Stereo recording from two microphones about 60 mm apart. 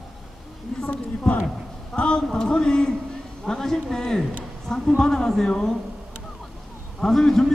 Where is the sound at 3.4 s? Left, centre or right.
Centre.